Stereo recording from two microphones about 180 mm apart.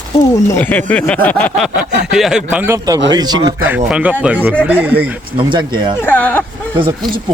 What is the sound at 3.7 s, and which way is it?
Speech, 5° right (ahead or behind).